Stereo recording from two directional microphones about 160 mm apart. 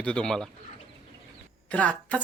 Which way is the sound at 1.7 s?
10° left (ahead or behind).